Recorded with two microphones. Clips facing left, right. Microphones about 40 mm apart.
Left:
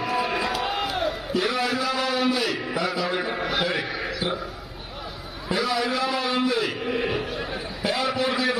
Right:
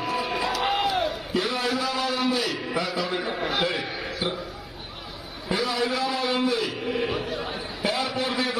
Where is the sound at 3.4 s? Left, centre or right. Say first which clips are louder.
Right 2 dB; right.